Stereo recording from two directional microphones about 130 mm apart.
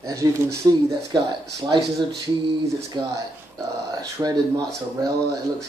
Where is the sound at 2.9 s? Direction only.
35° right (ahead or behind).